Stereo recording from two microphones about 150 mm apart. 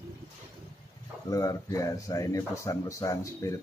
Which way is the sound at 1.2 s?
25° left (ahead or behind).